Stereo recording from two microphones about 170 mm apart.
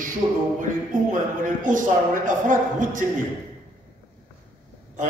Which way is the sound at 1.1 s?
50° right (ahead or behind).